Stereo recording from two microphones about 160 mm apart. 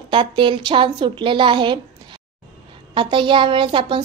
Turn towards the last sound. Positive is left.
turn(degrees=-30)  # may be behind; listen again after turning